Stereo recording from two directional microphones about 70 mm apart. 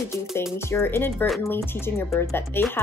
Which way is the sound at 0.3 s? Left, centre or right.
Left.